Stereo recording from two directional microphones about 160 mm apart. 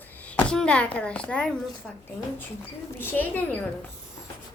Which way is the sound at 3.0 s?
10° left (ahead or behind).